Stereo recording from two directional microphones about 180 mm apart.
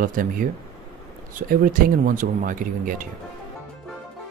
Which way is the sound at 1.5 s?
50° right (ahead or behind).